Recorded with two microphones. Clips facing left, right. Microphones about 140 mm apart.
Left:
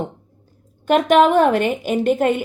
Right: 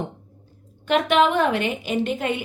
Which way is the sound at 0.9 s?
45° left (ahead or behind).